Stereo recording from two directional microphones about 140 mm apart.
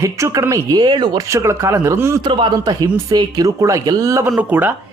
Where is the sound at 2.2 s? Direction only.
35° right (ahead or behind).